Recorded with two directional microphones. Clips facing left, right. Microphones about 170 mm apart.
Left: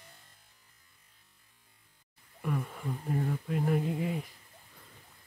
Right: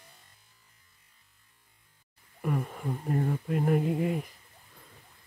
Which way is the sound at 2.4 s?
45° right (ahead or behind).